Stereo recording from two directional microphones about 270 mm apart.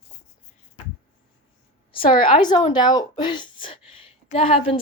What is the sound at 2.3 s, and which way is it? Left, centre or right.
Speech, centre.